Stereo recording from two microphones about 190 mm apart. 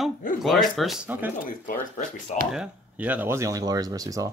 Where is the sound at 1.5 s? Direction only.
40° left (ahead or behind).